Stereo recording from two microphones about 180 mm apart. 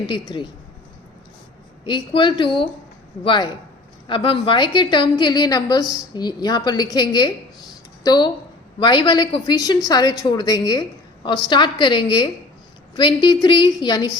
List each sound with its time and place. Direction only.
0.1 s a woman's voice: 25° left (ahead or behind)
1.8 s a woman's voice: 25° left (ahead or behind)